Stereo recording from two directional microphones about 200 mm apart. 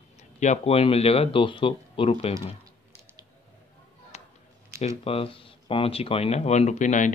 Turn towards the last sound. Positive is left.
turn(degrees=40)  # may be behind; listen again after turning